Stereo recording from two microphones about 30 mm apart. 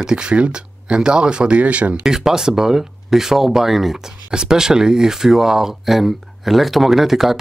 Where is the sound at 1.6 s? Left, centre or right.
Right.